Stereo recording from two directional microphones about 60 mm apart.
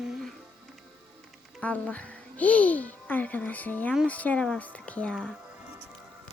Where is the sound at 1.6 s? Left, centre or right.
Left.